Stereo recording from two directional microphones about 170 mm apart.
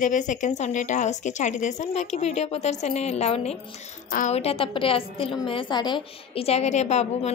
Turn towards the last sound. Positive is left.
turn(degrees=40)  # may be behind; listen again after turning